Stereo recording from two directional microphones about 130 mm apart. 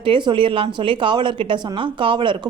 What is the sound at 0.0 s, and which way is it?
A woman's voice, 40° right (ahead or behind).